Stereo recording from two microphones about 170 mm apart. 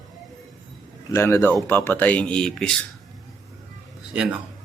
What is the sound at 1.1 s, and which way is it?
Speech, 15° left (ahead or behind).